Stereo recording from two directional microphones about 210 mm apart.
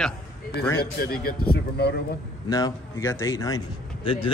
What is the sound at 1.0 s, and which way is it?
Speech, 45° left (ahead or behind).